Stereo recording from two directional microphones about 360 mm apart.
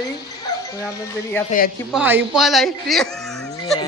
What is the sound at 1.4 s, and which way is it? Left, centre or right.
Speech, left.